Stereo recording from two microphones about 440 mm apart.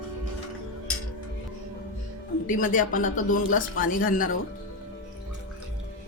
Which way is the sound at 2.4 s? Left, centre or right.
Centre.